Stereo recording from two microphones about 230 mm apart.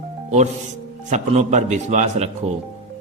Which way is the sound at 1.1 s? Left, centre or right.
Right.